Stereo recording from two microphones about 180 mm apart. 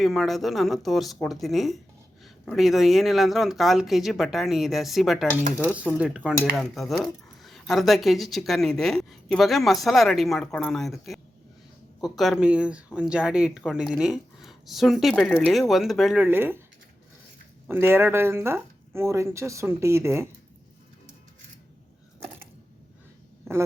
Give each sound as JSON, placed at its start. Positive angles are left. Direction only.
{"t": 0.0, "sound": "speech", "side_deg": 0}
{"t": 17.7, "sound": "speech", "side_deg": -10}
{"t": 23.5, "sound": "a man's voice", "side_deg": -15}